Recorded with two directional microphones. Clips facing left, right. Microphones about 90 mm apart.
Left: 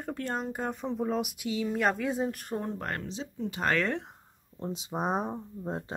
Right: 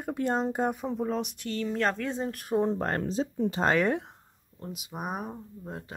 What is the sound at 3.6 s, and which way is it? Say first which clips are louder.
Speech: right 3 dB; 15° right (ahead or behind).